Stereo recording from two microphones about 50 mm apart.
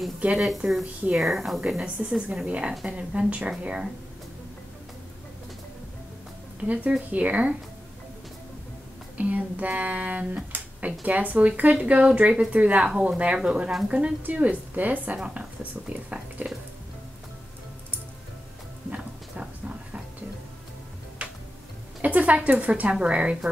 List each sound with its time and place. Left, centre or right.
0.2 s speech: right
0.6 s speech: centre
2.0 s speech: right
6.7 s speech: right
9.1 s speech: right
10.5 s a sound: right
11.1 s speech: right
13.4 s speech: centre; by 15.1 s right
15.1 s speech: right
21.2 s tick-tock: right
22.0 s speech: right